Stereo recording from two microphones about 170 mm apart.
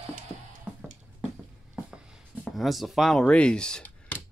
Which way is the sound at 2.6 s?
Centre (ahead or behind).